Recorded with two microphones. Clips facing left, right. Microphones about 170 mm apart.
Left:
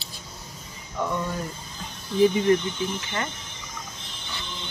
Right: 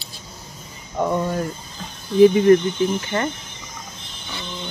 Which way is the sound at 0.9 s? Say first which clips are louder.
Right 6 dB; 45° right (ahead or behind).